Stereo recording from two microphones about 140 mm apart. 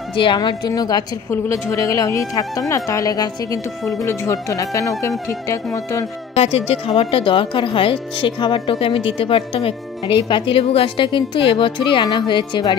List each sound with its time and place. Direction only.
0.1 s a woman's voice: 35° left (ahead or behind)
6.3 s speech: 45° left (ahead or behind)